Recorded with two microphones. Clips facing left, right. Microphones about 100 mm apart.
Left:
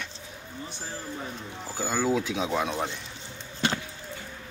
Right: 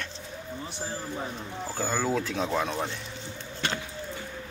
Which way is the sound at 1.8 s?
5° left (ahead or behind).